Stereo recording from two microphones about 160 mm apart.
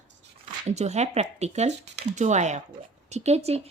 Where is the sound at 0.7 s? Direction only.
45° right (ahead or behind).